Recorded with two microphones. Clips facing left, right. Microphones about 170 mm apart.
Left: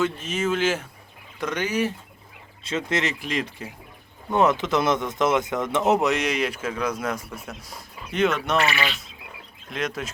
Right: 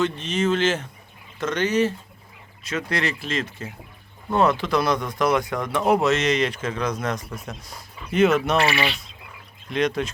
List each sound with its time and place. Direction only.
0.0 s speech: 5° left (ahead or behind)
2.6 s speech: 25° left (ahead or behind); by 8.5 s 5° right (ahead or behind)
8.5 s speech: 30° right (ahead or behind)
9.6 s speech: centre (ahead or behind)